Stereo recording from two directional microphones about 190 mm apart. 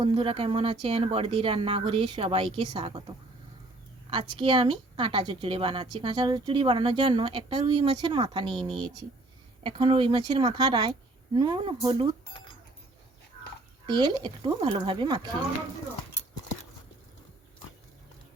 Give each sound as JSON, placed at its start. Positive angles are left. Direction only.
{"t": 0.0, "sound": "speech", "side_deg": -25}
{"t": 4.1, "sound": "speech", "side_deg": -25}
{"t": 9.6, "sound": "speech", "side_deg": -25}
{"t": 13.8, "sound": "speech", "side_deg": -25}